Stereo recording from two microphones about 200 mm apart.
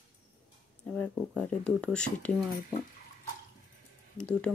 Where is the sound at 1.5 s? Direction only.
5° left (ahead or behind).